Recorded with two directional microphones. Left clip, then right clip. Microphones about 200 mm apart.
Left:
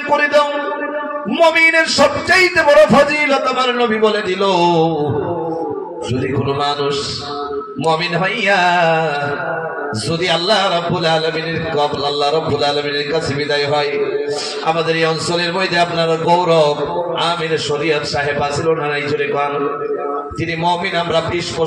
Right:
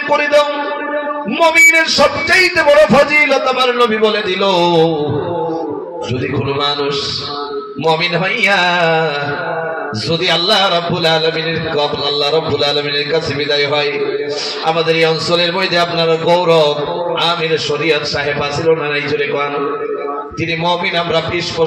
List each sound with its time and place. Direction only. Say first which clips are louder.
0.1 s a man's voice: right 1 dB; 35° right (ahead or behind)
1.4 s a man's voice: right 3 dB; 35° right (ahead or behind)
7.8 s a man's voice: right 2 dB; 35° right (ahead or behind)
10.2 s a man's voice: right 2 dB; 35° right (ahead or behind)
20.6 s a man's voice: right 1 dB; 35° right (ahead or behind)